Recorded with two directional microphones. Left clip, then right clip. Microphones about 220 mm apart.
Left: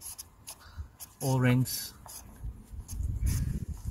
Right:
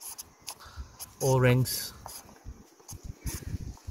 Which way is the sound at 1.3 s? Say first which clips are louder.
Right 5 dB; 55° right (ahead or behind).